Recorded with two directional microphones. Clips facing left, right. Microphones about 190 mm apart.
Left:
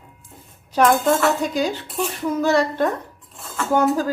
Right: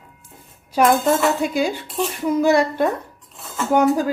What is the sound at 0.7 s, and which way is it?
Speech, 5° right (ahead or behind).